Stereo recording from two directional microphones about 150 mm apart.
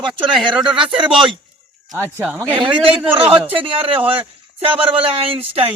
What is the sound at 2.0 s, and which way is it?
Speech, 10° right (ahead or behind).